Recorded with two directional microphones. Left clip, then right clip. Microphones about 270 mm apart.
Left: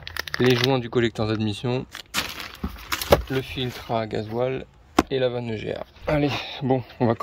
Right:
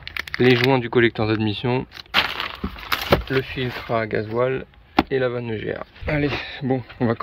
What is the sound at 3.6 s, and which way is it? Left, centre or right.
Speech, centre.